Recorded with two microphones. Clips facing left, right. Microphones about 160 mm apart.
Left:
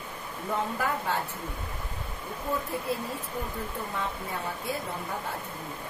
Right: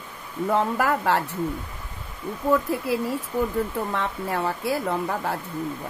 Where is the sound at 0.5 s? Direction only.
80° right.